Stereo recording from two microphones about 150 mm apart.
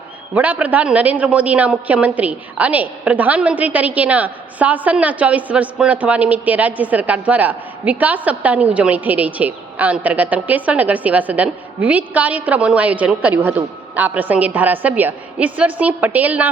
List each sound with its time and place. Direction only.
0.3 s a woman's voice: 10° right (ahead or behind)